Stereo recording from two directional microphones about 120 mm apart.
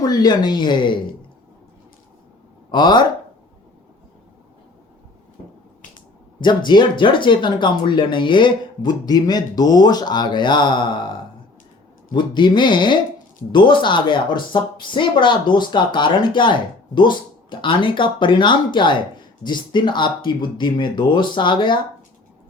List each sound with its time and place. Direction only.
0.0 s speech: 35° left (ahead or behind)
2.7 s speech: 40° left (ahead or behind)
6.4 s speech: 40° left (ahead or behind)